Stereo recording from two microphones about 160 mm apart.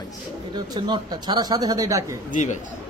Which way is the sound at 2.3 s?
50° left (ahead or behind).